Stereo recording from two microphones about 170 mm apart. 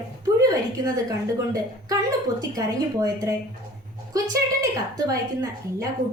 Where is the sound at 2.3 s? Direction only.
20° right (ahead or behind).